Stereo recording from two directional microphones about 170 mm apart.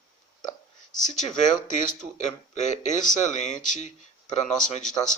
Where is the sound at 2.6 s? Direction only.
45° left (ahead or behind).